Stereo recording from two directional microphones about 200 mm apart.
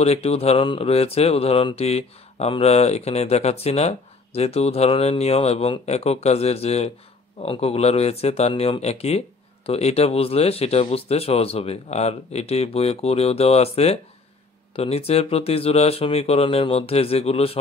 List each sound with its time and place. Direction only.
0.0 s speech: 30° left (ahead or behind)